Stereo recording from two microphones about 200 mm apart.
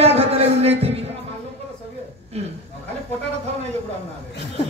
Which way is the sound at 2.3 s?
30° right (ahead or behind).